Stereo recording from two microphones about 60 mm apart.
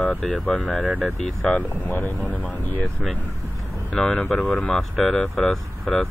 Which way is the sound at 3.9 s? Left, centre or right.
Centre.